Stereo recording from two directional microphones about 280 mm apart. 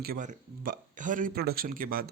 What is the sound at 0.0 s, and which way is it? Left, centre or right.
Speech, right.